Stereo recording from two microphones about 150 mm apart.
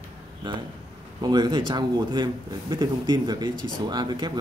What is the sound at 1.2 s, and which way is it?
A man's voice, 30° right (ahead or behind).